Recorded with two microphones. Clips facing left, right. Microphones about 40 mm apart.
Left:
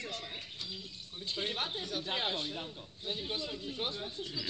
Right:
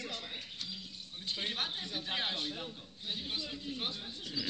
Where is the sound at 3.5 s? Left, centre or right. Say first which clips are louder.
Left 2 dB; centre.